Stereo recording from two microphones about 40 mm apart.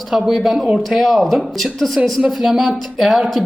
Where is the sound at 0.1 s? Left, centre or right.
Centre.